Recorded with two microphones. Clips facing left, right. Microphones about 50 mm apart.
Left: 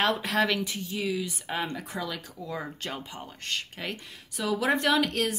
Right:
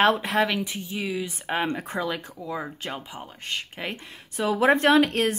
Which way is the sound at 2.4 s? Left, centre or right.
Centre.